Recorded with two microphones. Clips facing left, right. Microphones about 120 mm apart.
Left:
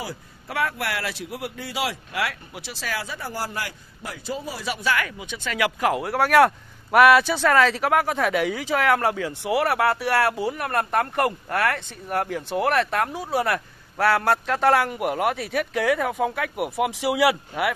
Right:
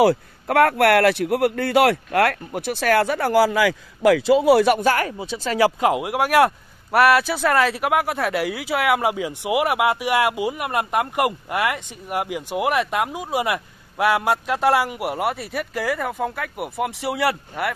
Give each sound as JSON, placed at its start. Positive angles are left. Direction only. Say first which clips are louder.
{"t": 0.0, "sound": "a man's voice", "louder": "right 18 dB", "side_deg": -65}
{"t": 5.8, "sound": "speech", "louder": "right 2 dB", "side_deg": -20}